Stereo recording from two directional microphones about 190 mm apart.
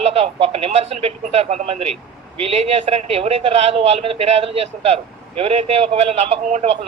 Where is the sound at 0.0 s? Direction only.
30° right (ahead or behind).